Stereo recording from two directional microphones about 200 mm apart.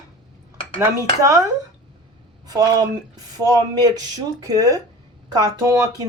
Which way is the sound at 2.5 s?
20° right (ahead or behind).